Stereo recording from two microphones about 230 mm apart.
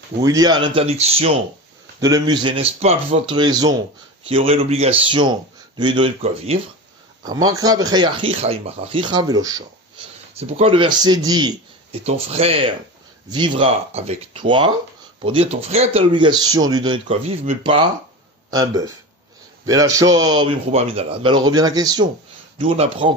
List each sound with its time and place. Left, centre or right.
0.2 s speech: centre
2.0 s speech: centre
7.4 s a man's voice: centre